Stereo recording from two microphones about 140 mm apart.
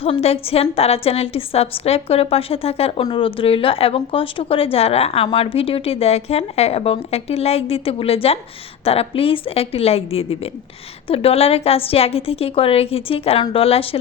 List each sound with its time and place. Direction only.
0.0 s a woman's voice: 45° left (ahead or behind)